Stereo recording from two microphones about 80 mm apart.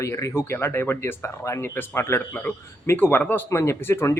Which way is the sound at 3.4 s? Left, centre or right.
Left.